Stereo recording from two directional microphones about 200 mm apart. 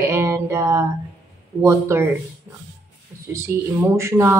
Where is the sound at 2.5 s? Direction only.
15° right (ahead or behind).